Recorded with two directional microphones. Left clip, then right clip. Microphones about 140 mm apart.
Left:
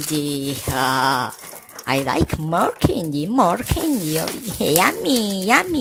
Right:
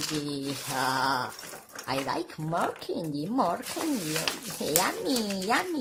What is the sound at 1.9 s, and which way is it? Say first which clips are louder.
Speech: left 11 dB; 45° left (ahead or behind).